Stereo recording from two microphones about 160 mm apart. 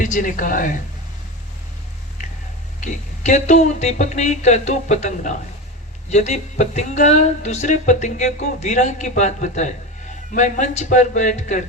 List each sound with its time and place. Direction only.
0.0 s a woman's voice: 55° left (ahead or behind)
2.8 s speech: 50° left (ahead or behind)